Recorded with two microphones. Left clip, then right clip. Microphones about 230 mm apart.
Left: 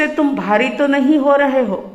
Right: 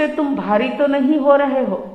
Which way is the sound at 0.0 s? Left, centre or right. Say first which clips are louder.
Left 2 dB; left.